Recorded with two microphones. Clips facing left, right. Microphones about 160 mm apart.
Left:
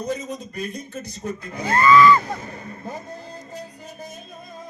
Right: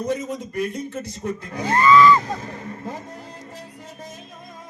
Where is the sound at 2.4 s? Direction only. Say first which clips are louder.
Right 2 dB; 90° right.